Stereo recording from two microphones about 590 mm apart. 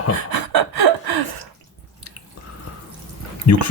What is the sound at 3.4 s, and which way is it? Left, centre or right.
Speech, left.